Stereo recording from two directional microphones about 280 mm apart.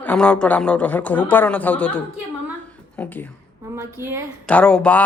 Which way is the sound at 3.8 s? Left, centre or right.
Centre.